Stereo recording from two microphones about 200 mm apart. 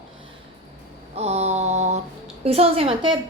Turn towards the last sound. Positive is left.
turn(degrees=-25)  # may be behind; listen again after turning